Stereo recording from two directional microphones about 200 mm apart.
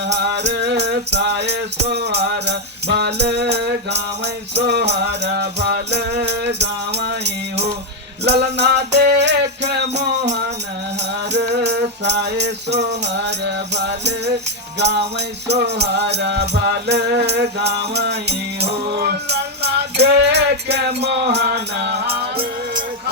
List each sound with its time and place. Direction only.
0.0 s music: 60° right (ahead or behind)